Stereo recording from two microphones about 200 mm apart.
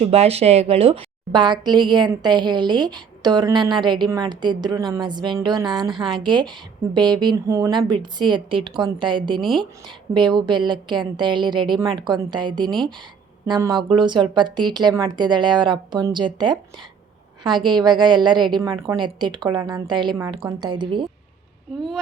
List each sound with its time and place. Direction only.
0.0 s a woman's voice: 30° right (ahead or behind)
21.8 s speech: centre (ahead or behind)